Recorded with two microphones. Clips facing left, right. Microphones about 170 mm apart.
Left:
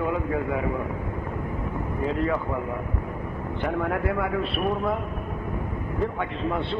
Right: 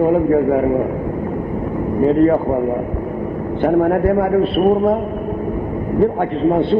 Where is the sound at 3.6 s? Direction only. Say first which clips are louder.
Right 12 dB; 45° right (ahead or behind).